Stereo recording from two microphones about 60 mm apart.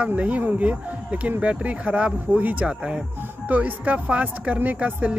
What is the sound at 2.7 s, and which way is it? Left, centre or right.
Speech, centre.